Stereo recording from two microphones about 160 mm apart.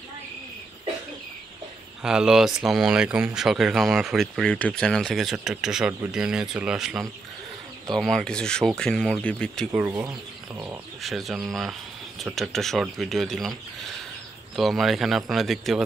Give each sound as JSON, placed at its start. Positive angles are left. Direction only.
{"t": 2.0, "sound": "speech", "side_deg": -5}
{"t": 9.7, "sound": "speech", "side_deg": -10}
{"t": 10.0, "sound": "speech", "side_deg": -20}
{"t": 11.0, "sound": "speech", "side_deg": 0}